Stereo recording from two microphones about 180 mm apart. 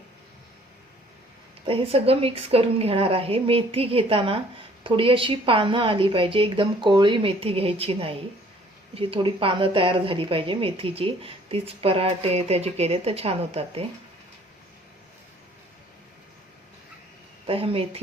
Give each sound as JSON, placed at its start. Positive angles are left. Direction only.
{"t": 1.6, "sound": "a woman's voice", "side_deg": -30}
{"t": 17.4, "sound": "speech", "side_deg": -30}